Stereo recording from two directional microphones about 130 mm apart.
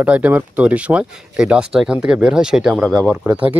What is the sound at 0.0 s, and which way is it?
Speech, 10° right (ahead or behind).